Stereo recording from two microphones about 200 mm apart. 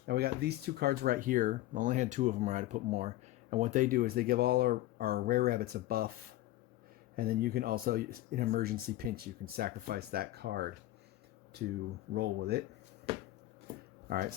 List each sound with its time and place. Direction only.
0.0 s speech: 50° right (ahead or behind)
7.2 s speech: 50° right (ahead or behind)
13.1 s a sound: 30° right (ahead or behind)
14.1 s speech: 50° right (ahead or behind)